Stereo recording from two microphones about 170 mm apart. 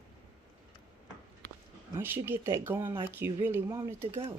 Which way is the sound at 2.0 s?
15° right (ahead or behind).